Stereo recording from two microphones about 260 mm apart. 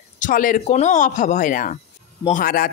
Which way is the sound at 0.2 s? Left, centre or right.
Left.